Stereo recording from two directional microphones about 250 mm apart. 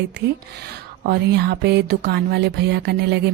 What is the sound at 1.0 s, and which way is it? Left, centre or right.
Speech, right.